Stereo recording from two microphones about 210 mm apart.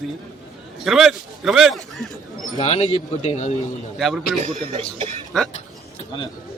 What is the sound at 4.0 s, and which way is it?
Speech, centre (ahead or behind).